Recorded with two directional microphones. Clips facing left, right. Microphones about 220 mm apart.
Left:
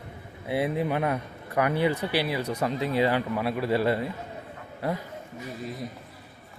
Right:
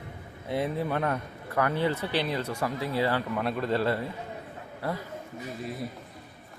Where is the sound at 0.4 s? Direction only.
10° left (ahead or behind).